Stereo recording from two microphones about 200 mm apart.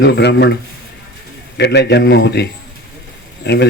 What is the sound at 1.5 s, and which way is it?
Speech, 55° left (ahead or behind).